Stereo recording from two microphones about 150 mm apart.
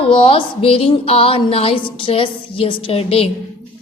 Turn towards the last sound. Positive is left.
turn(degrees=40)  # may be behind; listen again after turning